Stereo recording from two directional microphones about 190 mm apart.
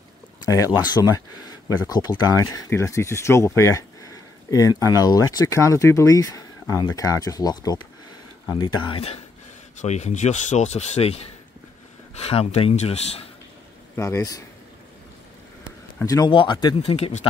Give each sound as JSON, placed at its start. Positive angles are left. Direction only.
{"t": 0.4, "sound": "speech", "side_deg": 20}
{"t": 13.9, "sound": "speech", "side_deg": 15}
{"t": 16.0, "sound": "speech", "side_deg": 20}